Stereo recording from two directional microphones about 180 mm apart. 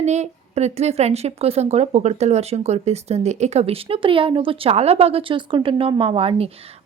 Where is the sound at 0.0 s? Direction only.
40° right (ahead or behind).